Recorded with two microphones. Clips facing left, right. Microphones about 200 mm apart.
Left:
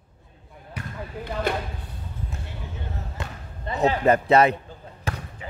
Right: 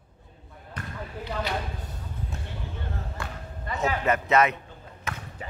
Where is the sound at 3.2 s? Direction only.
20° left (ahead or behind).